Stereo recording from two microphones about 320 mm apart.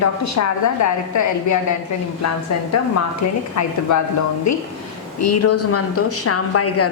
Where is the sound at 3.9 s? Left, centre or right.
Left.